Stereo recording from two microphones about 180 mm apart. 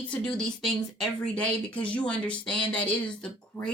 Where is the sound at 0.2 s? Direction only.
5° left (ahead or behind).